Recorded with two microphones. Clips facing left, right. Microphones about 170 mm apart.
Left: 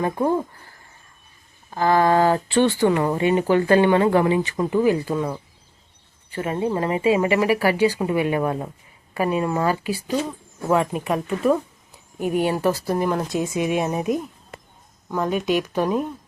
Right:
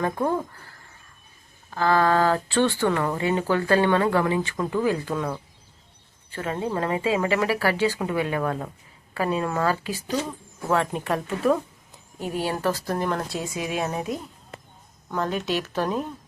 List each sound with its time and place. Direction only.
0.0 s speech: 15° left (ahead or behind)
1.7 s speech: 15° left (ahead or behind)
12.2 s speech: 15° left (ahead or behind)